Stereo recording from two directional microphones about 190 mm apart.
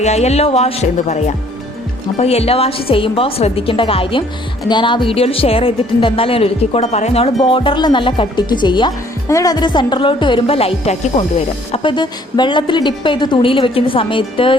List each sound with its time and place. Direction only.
0.0 s a woman's voice: 35° left (ahead or behind)